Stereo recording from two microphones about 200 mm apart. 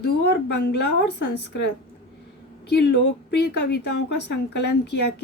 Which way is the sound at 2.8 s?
55° left (ahead or behind).